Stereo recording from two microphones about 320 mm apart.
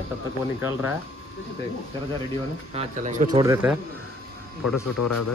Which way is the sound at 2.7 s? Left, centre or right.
Right.